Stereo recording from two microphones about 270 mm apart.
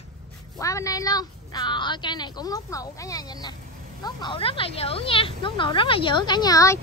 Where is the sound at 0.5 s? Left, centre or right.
Centre.